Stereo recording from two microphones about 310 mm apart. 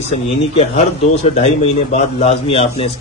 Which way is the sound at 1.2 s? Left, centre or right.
Centre.